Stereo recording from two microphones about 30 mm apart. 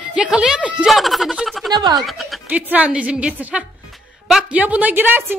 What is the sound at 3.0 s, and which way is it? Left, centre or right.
Speech, right.